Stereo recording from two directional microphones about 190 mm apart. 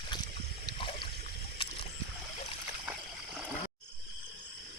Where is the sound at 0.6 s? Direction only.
25° left (ahead or behind).